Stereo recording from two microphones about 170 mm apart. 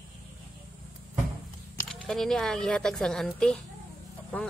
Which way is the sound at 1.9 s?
5° left (ahead or behind).